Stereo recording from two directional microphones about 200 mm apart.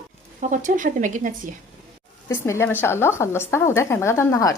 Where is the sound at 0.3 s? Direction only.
40° right (ahead or behind).